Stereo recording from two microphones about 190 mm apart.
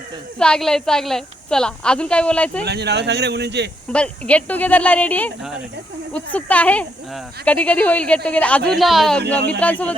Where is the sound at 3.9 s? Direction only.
5° left (ahead or behind).